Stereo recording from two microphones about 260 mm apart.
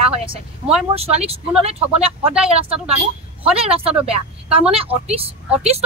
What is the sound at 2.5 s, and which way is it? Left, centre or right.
Speech, right.